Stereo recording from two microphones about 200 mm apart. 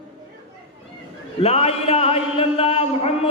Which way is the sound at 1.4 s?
30° left (ahead or behind).